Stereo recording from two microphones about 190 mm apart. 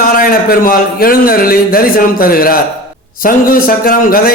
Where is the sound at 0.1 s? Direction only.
50° left (ahead or behind).